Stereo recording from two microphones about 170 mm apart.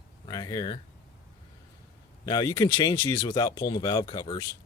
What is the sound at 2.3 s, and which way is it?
Speech, 25° left (ahead or behind).